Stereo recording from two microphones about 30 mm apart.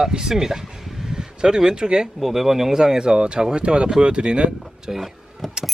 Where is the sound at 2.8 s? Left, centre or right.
Right.